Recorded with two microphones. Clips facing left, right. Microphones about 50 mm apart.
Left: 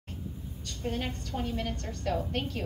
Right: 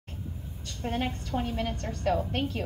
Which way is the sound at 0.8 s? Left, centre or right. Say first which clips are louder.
Right 3 dB; right.